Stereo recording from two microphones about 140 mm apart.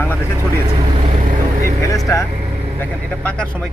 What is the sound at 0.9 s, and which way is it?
Vehicle, 60° right (ahead or behind).